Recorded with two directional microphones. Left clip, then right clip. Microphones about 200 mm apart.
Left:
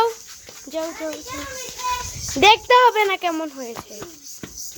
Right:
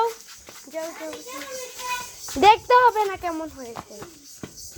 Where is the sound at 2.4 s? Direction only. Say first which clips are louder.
Left 2 dB; 5° left (ahead or behind).